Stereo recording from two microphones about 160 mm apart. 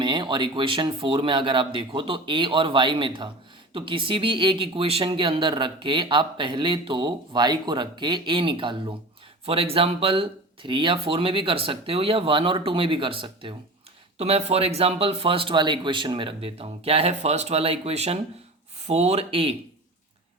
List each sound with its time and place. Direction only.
0.0 s speech: 30° right (ahead or behind)